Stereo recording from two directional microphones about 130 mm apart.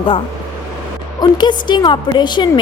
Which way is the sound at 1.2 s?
35° left (ahead or behind).